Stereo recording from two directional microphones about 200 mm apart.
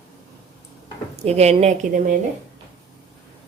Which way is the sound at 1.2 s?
35° right (ahead or behind).